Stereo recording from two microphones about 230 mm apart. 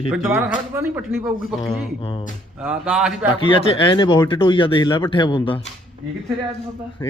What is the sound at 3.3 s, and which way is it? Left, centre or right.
Speech, left.